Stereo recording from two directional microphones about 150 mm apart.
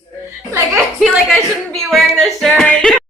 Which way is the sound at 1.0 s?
Centre (ahead or behind).